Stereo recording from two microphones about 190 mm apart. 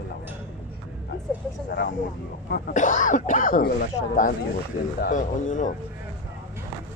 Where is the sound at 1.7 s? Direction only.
45° left (ahead or behind).